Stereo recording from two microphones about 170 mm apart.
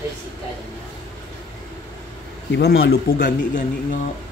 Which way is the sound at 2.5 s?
80° left.